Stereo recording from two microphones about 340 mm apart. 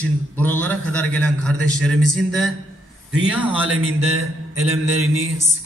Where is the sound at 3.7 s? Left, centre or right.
Right.